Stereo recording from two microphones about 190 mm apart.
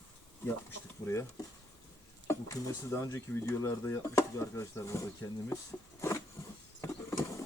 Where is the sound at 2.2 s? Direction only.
15° left (ahead or behind).